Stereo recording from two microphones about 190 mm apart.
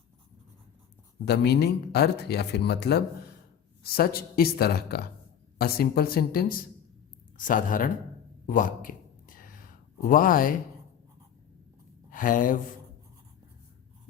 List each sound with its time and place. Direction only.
1.2 s speech: 60° left (ahead or behind)
8.4 s a sound: 45° left (ahead or behind)
12.1 s speech: 45° left (ahead or behind)